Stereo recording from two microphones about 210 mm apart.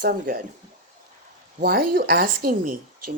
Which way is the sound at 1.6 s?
45° right (ahead or behind).